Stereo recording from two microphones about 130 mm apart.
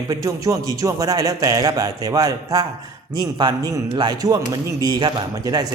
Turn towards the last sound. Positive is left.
turn(degrees=-30)  # may be behind; listen again after turning